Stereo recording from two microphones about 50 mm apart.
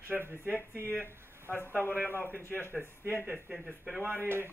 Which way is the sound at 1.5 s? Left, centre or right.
Left.